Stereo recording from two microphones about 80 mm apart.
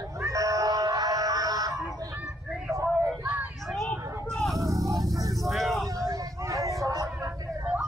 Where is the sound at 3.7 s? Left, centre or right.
Centre.